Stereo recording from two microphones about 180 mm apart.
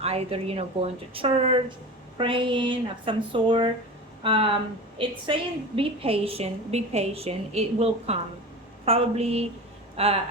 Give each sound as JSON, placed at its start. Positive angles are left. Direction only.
{"t": 0.0, "sound": "a woman's voice", "side_deg": -35}